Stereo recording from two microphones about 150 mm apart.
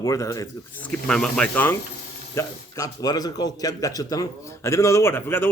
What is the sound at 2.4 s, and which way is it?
Speech, 25° left (ahead or behind).